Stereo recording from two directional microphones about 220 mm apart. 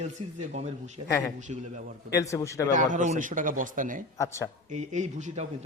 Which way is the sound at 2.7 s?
35° right (ahead or behind).